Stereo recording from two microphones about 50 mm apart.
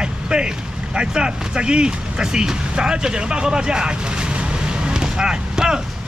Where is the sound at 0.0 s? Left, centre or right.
Centre.